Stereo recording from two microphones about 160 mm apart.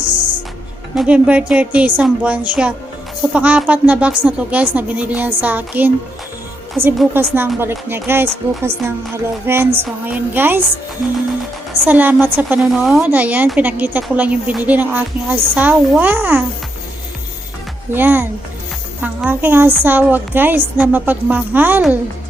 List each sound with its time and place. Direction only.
0.0 s music: 30° right (ahead or behind)
0.9 s a woman's voice: 10° right (ahead or behind)
7.1 s a woman's voice: 15° right (ahead or behind)
11.9 s a woman's voice: 10° right (ahead or behind)
17.9 s a woman's voice: 10° right (ahead or behind)